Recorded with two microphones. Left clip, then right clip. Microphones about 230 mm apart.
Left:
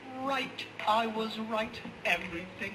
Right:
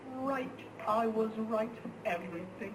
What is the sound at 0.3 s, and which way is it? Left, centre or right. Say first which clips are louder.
A man's voice: left 4 dB; left.